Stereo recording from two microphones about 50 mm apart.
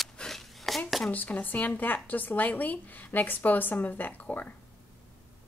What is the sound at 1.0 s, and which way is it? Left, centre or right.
Speech, left.